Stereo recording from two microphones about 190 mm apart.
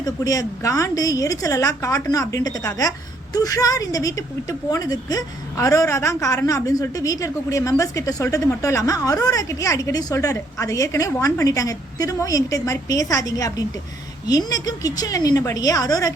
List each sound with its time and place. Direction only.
0.0 s a woman's voice: 20° left (ahead or behind)